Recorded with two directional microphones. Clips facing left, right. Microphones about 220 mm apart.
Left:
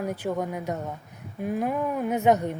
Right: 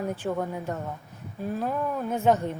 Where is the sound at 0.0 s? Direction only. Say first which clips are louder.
Left 1 dB; 10° left (ahead or behind).